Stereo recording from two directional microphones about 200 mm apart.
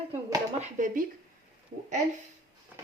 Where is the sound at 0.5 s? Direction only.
40° right (ahead or behind).